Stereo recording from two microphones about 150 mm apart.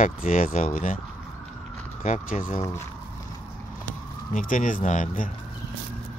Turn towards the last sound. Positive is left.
turn(degrees=60)  # may be behind; listen again after turning